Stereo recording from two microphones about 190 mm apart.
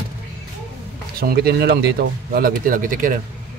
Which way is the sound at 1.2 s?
55° right (ahead or behind).